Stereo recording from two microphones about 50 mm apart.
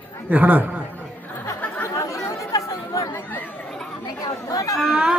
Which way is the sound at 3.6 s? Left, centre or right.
Centre.